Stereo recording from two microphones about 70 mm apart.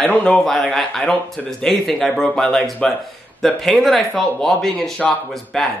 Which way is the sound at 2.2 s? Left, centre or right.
Centre.